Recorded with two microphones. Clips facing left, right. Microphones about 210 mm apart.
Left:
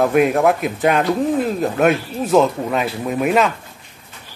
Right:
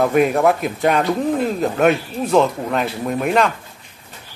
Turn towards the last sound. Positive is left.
turn(degrees=5)  # may be behind; listen again after turning